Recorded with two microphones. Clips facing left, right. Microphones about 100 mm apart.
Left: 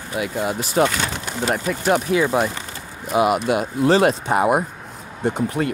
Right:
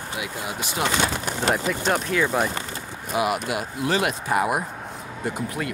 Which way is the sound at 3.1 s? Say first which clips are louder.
Left 6 dB; 25° left (ahead or behind).